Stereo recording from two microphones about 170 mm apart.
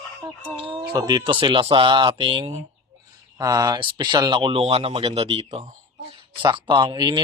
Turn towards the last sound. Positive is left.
turn(degrees=-25)  # may be behind; listen again after turning